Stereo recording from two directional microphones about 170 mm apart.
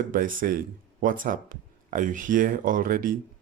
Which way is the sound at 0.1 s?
55° right (ahead or behind).